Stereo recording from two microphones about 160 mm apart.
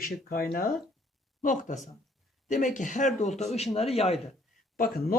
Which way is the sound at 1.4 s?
55° left (ahead or behind).